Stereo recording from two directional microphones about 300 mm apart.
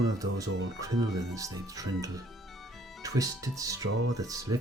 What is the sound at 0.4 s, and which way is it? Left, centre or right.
Speech, right.